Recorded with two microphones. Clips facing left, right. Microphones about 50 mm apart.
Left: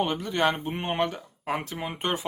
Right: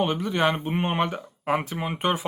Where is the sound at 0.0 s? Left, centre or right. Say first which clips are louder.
Right 2 dB; centre.